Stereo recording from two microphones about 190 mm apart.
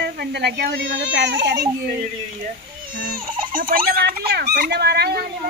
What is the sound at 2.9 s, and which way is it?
A woman's voice, 50° right (ahead or behind).